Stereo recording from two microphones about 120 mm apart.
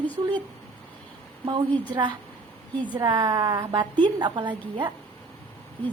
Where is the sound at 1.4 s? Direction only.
40° right (ahead or behind).